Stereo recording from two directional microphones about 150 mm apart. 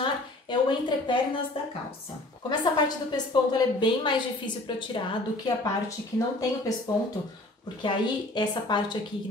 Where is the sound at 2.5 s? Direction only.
30° left (ahead or behind).